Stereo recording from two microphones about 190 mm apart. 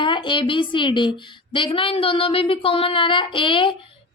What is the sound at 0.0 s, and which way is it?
Speech, 25° left (ahead or behind).